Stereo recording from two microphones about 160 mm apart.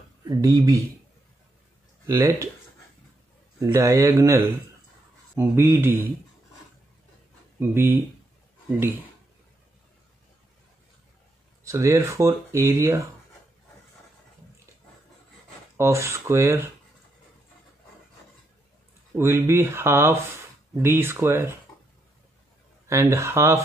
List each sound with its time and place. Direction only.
0.3 s speech: 20° right (ahead or behind)
2.0 s speech: 15° right (ahead or behind)
3.5 s speech: 20° right (ahead or behind)
7.5 s speech: 15° right (ahead or behind)
11.6 s speech: 20° right (ahead or behind)
15.8 s speech: 15° right (ahead or behind)
19.1 s speech: 15° right (ahead or behind)
22.8 s speech: 20° right (ahead or behind)